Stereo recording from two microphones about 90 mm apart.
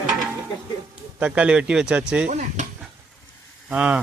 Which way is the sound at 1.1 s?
15° right (ahead or behind).